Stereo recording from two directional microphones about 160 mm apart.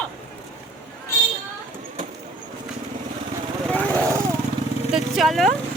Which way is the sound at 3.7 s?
10° left (ahead or behind).